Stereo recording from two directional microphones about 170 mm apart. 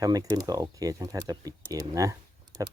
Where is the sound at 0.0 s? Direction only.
20° right (ahead or behind).